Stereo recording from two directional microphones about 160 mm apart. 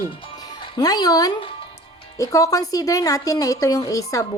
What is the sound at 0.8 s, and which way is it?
A woman's voice, 25° left (ahead or behind).